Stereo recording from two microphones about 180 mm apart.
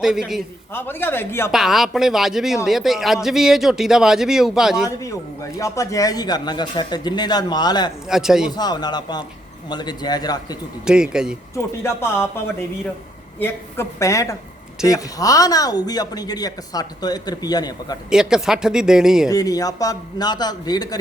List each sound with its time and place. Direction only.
0.0 s speech: centre (ahead or behind)
0.7 s a woman's voice: 10° left (ahead or behind)
1.5 s speech: centre (ahead or behind)
4.9 s a man's voice: 15° left (ahead or behind)
8.0 s speech: 5° right (ahead or behind)
8.5 s speech: 20° left (ahead or behind)
10.8 s speech: 5° right (ahead or behind)
11.5 s a woman's voice: 15° left (ahead or behind)
13.4 s a woman's voice: 15° left (ahead or behind)
18.1 s speech: 5° right (ahead or behind)
19.3 s speech: 20° left (ahead or behind)